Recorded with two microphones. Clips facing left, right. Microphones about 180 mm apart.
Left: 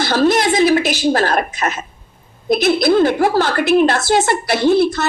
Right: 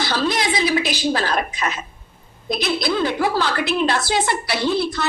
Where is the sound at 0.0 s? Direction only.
50° left (ahead or behind).